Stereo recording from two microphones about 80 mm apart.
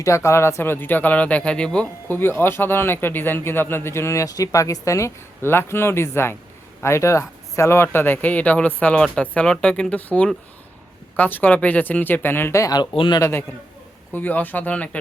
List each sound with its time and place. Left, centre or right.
0.0 s a man's voice: left; by 1.9 s centre
2.0 s a man's voice: left
11.2 s a man's voice: left
12.7 s speech: left
14.1 s a man's voice: left